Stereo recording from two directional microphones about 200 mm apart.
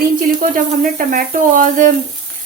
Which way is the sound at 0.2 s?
45° right (ahead or behind).